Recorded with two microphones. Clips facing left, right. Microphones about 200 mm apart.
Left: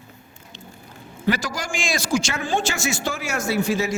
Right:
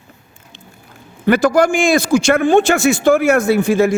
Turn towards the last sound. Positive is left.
turn(degrees=-55)  # may be behind; listen again after turning